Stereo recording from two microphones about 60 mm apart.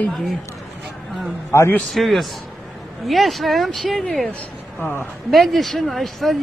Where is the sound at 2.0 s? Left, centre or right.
Centre.